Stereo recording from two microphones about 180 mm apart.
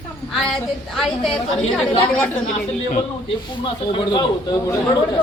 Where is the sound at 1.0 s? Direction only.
Centre (ahead or behind).